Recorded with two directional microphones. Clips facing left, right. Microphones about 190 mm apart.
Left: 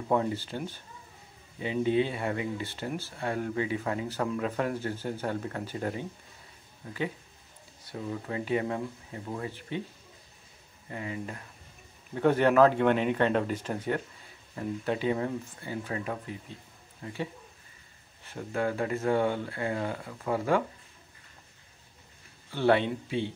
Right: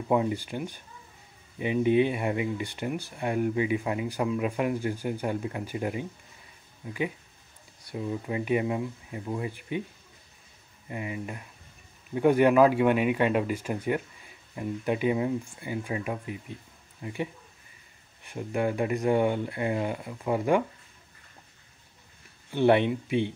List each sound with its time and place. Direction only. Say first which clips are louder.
0.1 s speech: right 2 dB; 15° right (ahead or behind)
10.9 s speech: right 2 dB; 15° right (ahead or behind)
22.5 s speech: right 3 dB; 20° right (ahead or behind)